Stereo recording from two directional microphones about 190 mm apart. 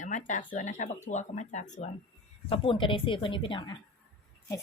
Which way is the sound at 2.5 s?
30° left (ahead or behind).